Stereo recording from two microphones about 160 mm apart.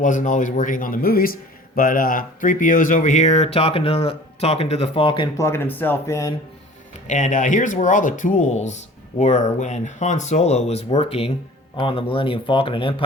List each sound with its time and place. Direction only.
0.0 s a man's voice: 55° left (ahead or behind); by 5.3 s 30° left (ahead or behind)
5.4 s speech: 15° left (ahead or behind)
7.1 s a man's voice: 50° left (ahead or behind); by 12.9 s 30° left (ahead or behind)